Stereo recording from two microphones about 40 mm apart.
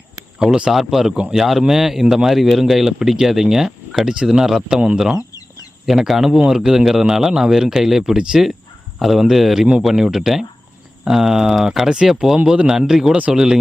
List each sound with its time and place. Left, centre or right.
0.3 s speech: centre
5.8 s speech: centre
9.0 s speech: centre